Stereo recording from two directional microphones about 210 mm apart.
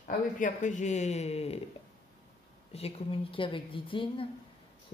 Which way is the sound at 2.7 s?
30° left (ahead or behind).